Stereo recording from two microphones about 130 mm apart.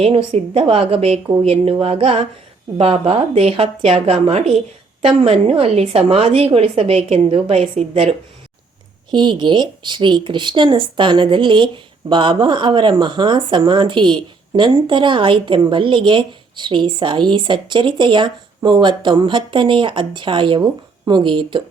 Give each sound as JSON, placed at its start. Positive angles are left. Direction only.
{"t": 0.0, "sound": "a woman's voice", "side_deg": -45}
{"t": 9.1, "sound": "speech", "side_deg": -35}